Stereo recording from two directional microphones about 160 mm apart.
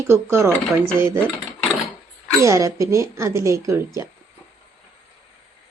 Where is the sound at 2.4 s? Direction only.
20° right (ahead or behind).